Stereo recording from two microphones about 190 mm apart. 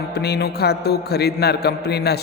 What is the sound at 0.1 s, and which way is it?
A man's voice, 55° left (ahead or behind).